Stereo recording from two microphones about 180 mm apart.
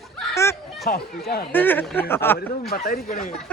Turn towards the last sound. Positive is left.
turn(degrees=55)  # may be behind; listen again after turning